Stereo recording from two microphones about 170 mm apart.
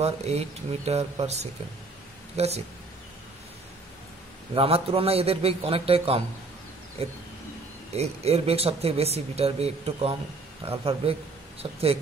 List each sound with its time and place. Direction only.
0.0 s speech: 40° right (ahead or behind)
4.6 s speech: 35° right (ahead or behind)